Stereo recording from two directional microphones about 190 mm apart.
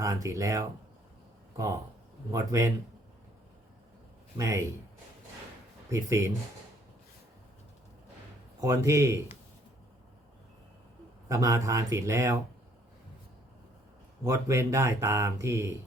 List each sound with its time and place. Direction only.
0.0 s speech: 15° right (ahead or behind)
2.3 s speech: 15° right (ahead or behind)
4.4 s speech: 15° right (ahead or behind)
5.9 s speech: 15° right (ahead or behind)
8.6 s speech: 15° right (ahead or behind)
11.3 s speech: 15° right (ahead or behind)
14.3 s speech: 15° right (ahead or behind)